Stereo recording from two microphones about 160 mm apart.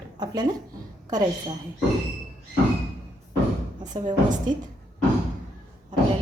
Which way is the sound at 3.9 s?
30° right (ahead or behind).